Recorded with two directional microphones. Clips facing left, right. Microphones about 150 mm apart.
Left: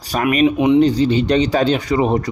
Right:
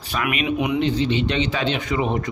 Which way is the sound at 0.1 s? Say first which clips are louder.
Left 8 dB; 40° left (ahead or behind).